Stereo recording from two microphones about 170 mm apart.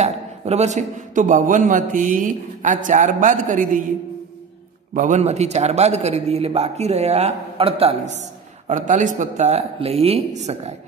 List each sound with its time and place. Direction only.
0.0 s a man's voice: 40° right (ahead or behind)
4.9 s a man's voice: 45° right (ahead or behind)